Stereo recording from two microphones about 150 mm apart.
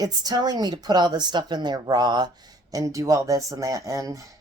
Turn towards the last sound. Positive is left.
turn(degrees=-20)  # may be behind; listen again after turning